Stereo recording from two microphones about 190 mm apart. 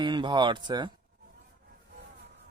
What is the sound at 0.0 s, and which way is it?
Speech, 25° right (ahead or behind).